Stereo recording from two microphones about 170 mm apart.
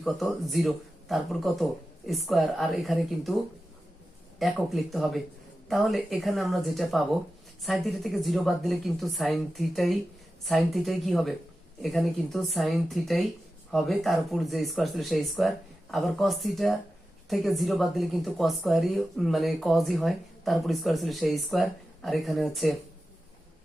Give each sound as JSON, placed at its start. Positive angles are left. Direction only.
{"t": 0.0, "sound": "a woman's voice", "side_deg": 0}
{"t": 4.4, "sound": "a woman's voice", "side_deg": 0}